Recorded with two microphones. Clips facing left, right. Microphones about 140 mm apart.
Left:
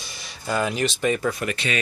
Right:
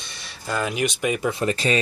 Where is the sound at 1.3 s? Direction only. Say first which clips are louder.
Right 5 dB; 30° right (ahead or behind).